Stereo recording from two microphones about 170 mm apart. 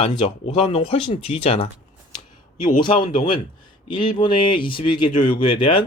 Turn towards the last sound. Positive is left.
turn(degrees=30)  # may be behind; listen again after turning